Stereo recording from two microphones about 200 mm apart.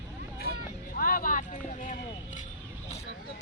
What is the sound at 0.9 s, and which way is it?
Speech, 45° left (ahead or behind).